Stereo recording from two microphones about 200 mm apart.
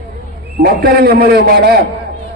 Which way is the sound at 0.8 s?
50° right (ahead or behind).